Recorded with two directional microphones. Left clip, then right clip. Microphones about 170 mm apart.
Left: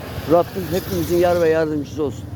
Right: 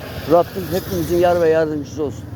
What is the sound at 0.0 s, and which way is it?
Vehicle, 15° right (ahead or behind).